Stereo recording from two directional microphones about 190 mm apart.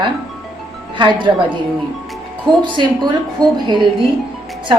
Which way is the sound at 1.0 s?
25° right (ahead or behind).